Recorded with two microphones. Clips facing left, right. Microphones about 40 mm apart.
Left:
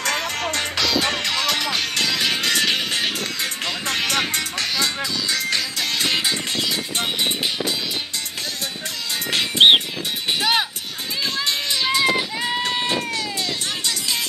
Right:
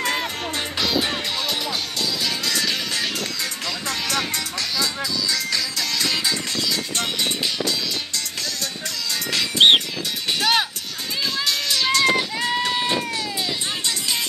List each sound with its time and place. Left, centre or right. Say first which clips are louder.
1.0 s music: left 3 dB; left
2.2 s music: left 3 dB; left
9.6 s music: left 1 dB; centre
11.7 s a sound: right 1 dB; centre